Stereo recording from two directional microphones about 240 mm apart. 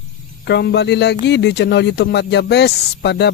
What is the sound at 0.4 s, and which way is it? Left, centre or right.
Speech, left.